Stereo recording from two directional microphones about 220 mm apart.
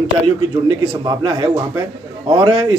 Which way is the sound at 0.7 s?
20° right (ahead or behind).